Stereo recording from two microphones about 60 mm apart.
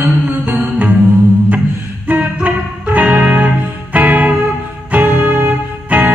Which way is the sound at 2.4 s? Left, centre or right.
Right.